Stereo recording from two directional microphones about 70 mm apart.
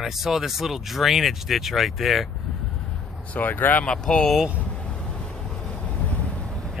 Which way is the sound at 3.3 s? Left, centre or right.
Left.